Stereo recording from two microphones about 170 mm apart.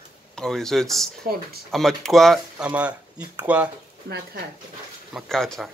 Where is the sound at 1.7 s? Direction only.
Centre (ahead or behind).